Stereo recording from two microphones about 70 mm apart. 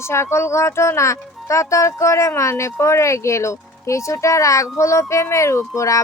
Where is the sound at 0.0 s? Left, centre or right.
Left.